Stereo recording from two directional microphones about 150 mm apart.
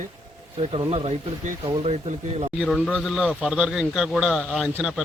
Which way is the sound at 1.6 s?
35° right (ahead or behind).